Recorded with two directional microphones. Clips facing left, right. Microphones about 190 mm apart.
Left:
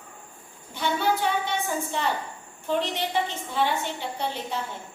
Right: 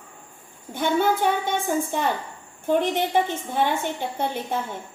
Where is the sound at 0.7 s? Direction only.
50° right (ahead or behind).